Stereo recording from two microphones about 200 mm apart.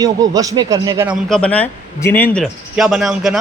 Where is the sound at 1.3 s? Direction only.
5° left (ahead or behind).